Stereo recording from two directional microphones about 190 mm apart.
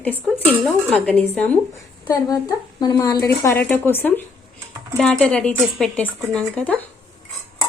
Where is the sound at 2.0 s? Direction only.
20° left (ahead or behind).